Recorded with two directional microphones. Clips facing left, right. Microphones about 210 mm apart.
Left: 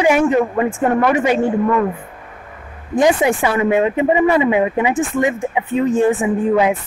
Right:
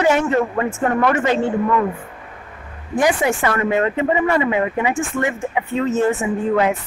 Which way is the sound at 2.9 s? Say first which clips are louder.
Left 3 dB; 20° left (ahead or behind).